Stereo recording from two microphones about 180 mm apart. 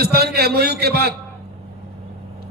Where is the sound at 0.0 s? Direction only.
60° right (ahead or behind).